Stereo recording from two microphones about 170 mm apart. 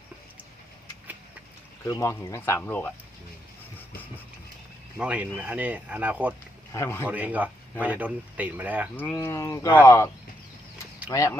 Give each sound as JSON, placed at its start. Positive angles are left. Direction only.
{"t": 1.8, "sound": "speech", "side_deg": 15}
{"t": 4.9, "sound": "speech", "side_deg": -10}
{"t": 6.7, "sound": "speech", "side_deg": 15}
{"t": 7.0, "sound": "speech", "side_deg": -10}
{"t": 9.0, "sound": "speech", "side_deg": 15}
{"t": 11.1, "sound": "speech", "side_deg": 15}